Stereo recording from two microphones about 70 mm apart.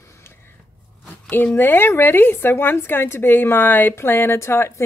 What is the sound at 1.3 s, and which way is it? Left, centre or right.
Speech, left.